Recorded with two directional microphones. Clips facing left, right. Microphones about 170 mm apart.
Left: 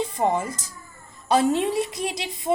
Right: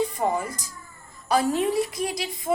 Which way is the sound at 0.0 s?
20° left (ahead or behind).